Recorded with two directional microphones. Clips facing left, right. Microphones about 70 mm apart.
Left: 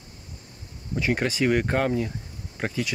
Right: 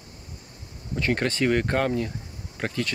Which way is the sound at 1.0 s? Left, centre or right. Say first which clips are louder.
Even; centre.